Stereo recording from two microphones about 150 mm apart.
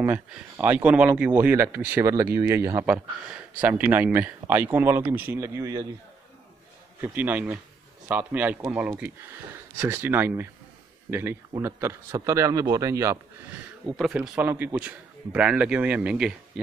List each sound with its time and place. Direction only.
0.6 s speech: 10° right (ahead or behind)
7.0 s a man's voice: 10° right (ahead or behind)
13.8 s speech: centre (ahead or behind)